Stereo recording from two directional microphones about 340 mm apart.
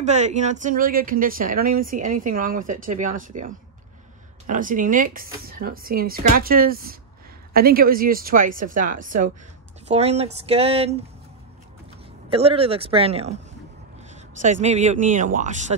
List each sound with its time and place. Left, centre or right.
0.0 s speech: centre
12.3 s speech: centre